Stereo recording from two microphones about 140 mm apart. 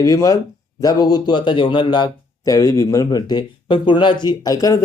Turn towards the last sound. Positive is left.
turn(degrees=25)  # may be behind; listen again after turning